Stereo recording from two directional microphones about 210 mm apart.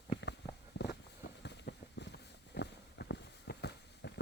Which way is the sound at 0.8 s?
55° left (ahead or behind).